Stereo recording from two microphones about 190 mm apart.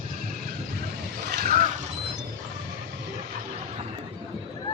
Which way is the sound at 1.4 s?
45° right (ahead or behind).